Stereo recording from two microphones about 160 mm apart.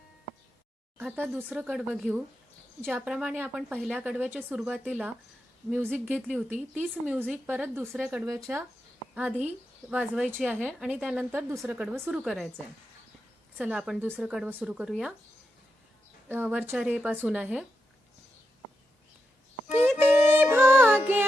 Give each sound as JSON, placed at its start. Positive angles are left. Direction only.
{"t": 0.9, "sound": "speech", "side_deg": -10}
{"t": 6.1, "sound": "speech", "side_deg": 5}
{"t": 6.5, "sound": "speech", "side_deg": -10}
{"t": 9.9, "sound": "speech", "side_deg": -10}
{"t": 11.3, "sound": "speech", "side_deg": -15}
{"t": 11.6, "sound": "speech", "side_deg": -5}
{"t": 13.6, "sound": "speech", "side_deg": -10}
{"t": 16.3, "sound": "speech", "side_deg": -10}
{"t": 19.6, "sound": "a sound", "side_deg": -10}
{"t": 20.0, "sound": "music", "side_deg": -15}